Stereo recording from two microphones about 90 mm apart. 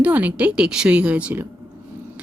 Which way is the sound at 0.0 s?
15° right (ahead or behind).